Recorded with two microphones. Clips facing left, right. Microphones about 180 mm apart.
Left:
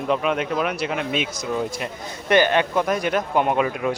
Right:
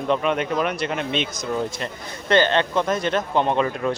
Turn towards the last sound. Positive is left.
turn(degrees=10)  # may be behind; listen again after turning